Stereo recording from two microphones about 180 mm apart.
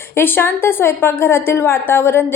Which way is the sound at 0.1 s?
10° left (ahead or behind).